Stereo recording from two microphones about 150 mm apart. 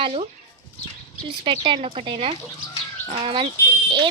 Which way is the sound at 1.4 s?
35° right (ahead or behind).